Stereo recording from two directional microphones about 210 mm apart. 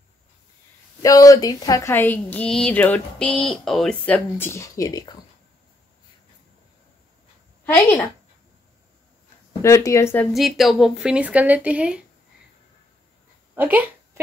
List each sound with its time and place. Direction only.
1.0 s a woman's voice: 15° left (ahead or behind)
9.5 s a woman's voice: 15° left (ahead or behind)
10.3 s speech: centre (ahead or behind)
13.6 s speech: 10° right (ahead or behind)